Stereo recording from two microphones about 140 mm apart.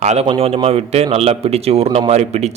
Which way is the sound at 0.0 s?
55° right (ahead or behind).